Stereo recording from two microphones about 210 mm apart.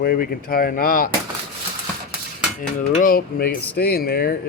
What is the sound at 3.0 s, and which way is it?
Speech, 45° left (ahead or behind).